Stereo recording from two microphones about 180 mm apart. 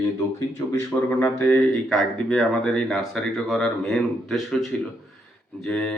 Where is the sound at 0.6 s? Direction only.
20° left (ahead or behind).